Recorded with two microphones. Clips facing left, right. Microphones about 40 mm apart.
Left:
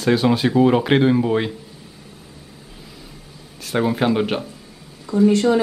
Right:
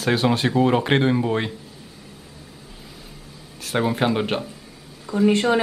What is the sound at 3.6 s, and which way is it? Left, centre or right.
Speech, centre.